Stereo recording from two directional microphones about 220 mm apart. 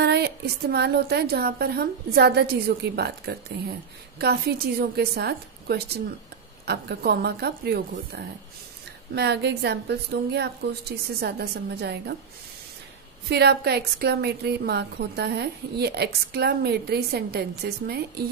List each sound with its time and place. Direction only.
0.0 s a woman's voice: 45° right (ahead or behind)
13.3 s a woman's voice: 45° right (ahead or behind)